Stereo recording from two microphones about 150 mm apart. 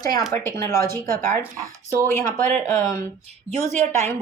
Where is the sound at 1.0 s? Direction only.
70° right (ahead or behind).